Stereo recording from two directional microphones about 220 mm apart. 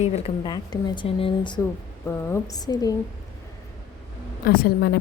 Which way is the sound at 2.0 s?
15° left (ahead or behind).